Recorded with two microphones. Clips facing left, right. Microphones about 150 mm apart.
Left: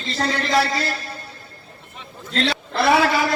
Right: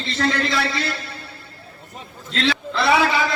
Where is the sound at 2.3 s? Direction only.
50° left (ahead or behind).